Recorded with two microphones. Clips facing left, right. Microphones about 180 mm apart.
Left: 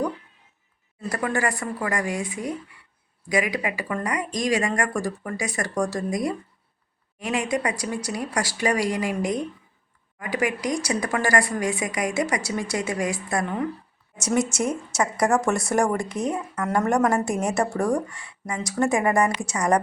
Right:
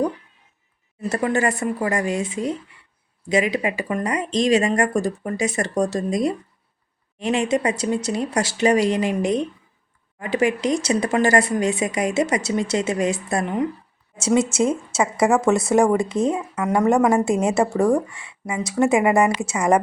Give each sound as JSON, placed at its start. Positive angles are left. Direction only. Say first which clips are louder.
{"t": 1.1, "sound": "speech", "louder": "right 4 dB", "side_deg": -25}